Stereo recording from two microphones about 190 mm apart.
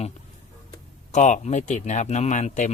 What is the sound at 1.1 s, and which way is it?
Speech, 40° left (ahead or behind).